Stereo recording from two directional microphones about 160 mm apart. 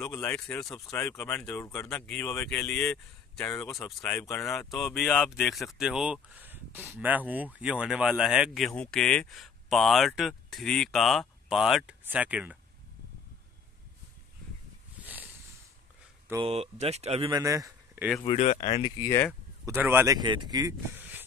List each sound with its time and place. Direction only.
0.2 s speech: 10° left (ahead or behind)
2.9 s speech: 20° left (ahead or behind)
4.0 s speech: 10° left (ahead or behind); by 12.5 s 10° right (ahead or behind)
16.4 s speech: 40° right (ahead or behind)
17.3 s speech: 20° right (ahead or behind)
18.2 s speech: 40° left (ahead or behind)
18.9 s speech: 20° left (ahead or behind)
19.6 s speech: 15° right (ahead or behind)
20.2 s speech: 25° right (ahead or behind)
20.9 s a sound: 10° right (ahead or behind)